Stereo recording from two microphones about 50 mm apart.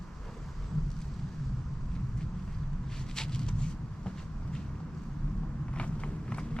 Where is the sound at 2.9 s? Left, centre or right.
Centre.